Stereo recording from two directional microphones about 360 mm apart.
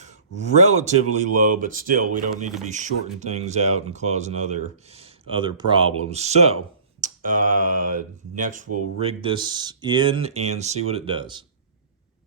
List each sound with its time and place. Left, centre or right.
0.3 s speech: centre
7.0 s mantra: right
7.9 s speech: right